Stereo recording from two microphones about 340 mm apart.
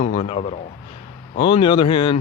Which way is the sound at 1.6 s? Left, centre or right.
Centre.